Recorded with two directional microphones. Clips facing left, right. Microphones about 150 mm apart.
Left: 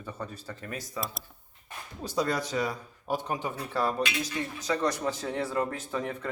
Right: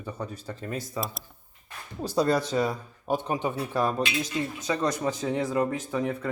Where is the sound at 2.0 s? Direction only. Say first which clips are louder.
Right 5 dB; 30° right (ahead or behind); by 6.3 s 10° right (ahead or behind).